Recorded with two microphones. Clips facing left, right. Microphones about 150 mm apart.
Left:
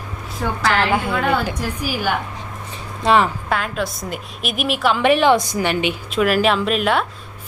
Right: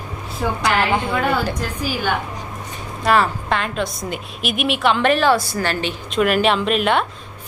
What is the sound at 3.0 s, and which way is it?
Speech, 20° left (ahead or behind).